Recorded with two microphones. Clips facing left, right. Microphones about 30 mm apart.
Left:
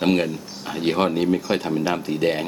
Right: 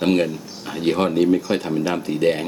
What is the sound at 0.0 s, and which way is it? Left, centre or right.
Speech, centre.